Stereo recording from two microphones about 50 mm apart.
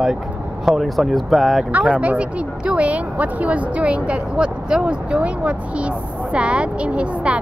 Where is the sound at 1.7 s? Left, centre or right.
Right.